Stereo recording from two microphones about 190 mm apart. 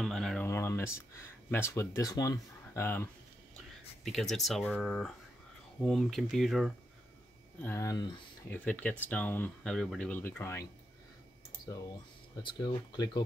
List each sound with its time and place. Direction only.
0.0 s a sound: centre (ahead or behind)
0.5 s speech: 15° left (ahead or behind)
4.0 s speech: centre (ahead or behind)
7.6 s speech: 15° left (ahead or behind)
12.4 s speech: 20° left (ahead or behind)